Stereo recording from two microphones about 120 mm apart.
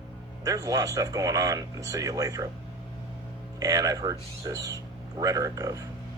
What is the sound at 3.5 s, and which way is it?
Speech, 30° right (ahead or behind).